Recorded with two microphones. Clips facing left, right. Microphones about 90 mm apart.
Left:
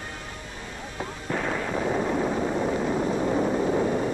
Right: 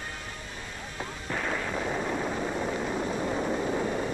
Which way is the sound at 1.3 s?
30° left (ahead or behind).